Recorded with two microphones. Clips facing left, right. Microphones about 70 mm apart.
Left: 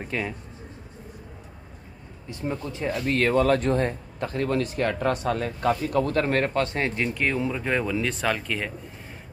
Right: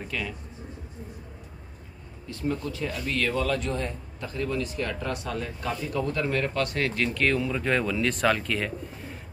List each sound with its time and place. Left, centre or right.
0.0 s speech: left
2.2 s speech: left
2.9 s speech: left
6.6 s speech: left; by 8.7 s centre